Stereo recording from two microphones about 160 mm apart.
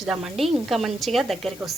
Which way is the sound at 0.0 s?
Centre (ahead or behind).